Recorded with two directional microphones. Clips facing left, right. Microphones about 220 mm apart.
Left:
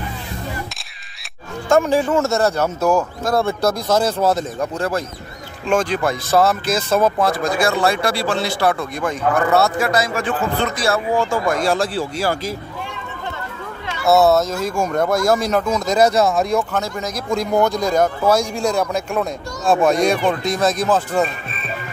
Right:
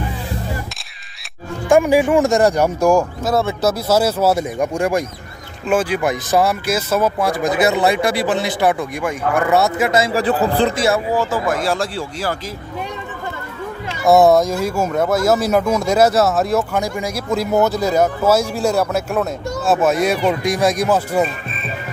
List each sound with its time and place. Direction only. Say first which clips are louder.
1.7 s speech: right 3 dB; 10° right (ahead or behind); by 10.7 s 35° right (ahead or behind)
11.1 s speech: even; 5° right (ahead or behind)
14.0 s speech: right 3 dB; 15° right (ahead or behind)